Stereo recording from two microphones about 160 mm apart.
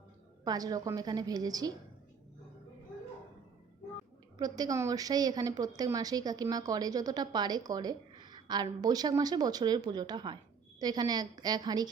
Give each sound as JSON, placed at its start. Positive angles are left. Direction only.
{"t": 0.4, "sound": "a woman's voice", "side_deg": -25}
{"t": 4.4, "sound": "a woman's voice", "side_deg": -25}